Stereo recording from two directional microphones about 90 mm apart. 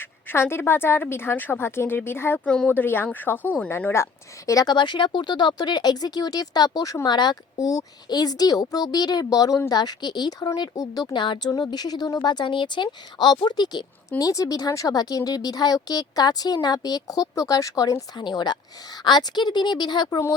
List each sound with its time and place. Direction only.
0.0 s a woman's voice: 25° left (ahead or behind)
2.5 s speech: 10° left (ahead or behind)
2.7 s a woman's voice: 25° left (ahead or behind); by 4.7 s 40° left (ahead or behind)
4.7 s speech: 60° left (ahead or behind)
14.1 s speech: 40° left (ahead or behind)
18.2 s speech: 55° left (ahead or behind)